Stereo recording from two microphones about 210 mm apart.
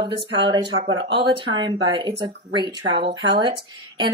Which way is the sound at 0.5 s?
25° right (ahead or behind).